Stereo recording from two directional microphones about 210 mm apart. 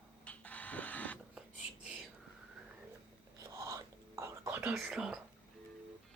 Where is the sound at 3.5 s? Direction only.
15° right (ahead or behind).